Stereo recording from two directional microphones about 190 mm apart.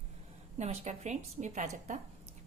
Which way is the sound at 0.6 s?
35° right (ahead or behind).